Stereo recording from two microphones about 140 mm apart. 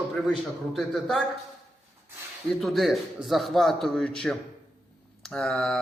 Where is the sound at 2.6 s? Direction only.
Centre (ahead or behind).